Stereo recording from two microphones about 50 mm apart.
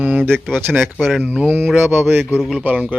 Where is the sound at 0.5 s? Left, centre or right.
Right.